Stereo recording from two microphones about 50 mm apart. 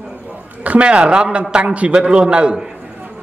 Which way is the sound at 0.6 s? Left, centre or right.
Right.